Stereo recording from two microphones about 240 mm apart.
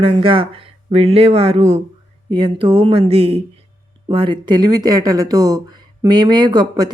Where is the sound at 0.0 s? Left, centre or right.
Right.